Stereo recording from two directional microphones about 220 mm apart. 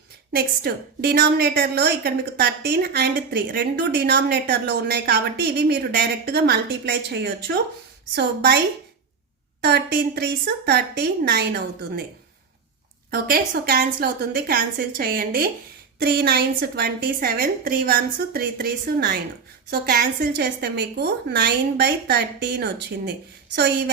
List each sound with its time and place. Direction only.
0.3 s a woman's voice: 45° right (ahead or behind)
13.1 s a woman's voice: 45° right (ahead or behind)